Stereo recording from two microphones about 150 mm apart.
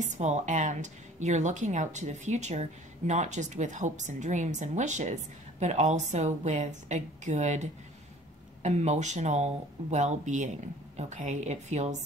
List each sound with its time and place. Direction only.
0.0 s a woman's voice: 50° right (ahead or behind)